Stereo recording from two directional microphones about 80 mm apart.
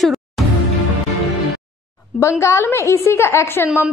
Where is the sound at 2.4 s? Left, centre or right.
Left.